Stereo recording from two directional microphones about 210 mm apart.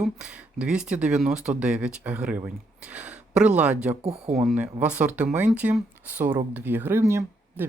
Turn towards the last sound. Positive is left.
turn(degrees=-10)  # may be behind; listen again after turning